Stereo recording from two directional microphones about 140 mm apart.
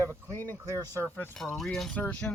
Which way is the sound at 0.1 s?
15° left (ahead or behind).